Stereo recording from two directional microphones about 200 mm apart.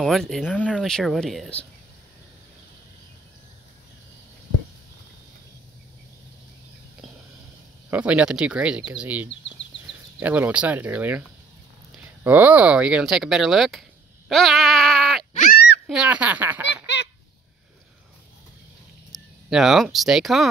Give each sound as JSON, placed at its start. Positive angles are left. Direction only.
{"t": 0.0, "sound": "speech", "side_deg": 0}
{"t": 7.9, "sound": "speech", "side_deg": -5}
{"t": 9.3, "sound": "speech", "side_deg": 65}
{"t": 10.1, "sound": "speech", "side_deg": -5}
{"t": 15.3, "sound": "goat", "side_deg": 40}
{"t": 15.9, "sound": "speech", "side_deg": -5}
{"t": 16.8, "sound": "honk", "side_deg": 60}
{"t": 19.5, "sound": "speech", "side_deg": 0}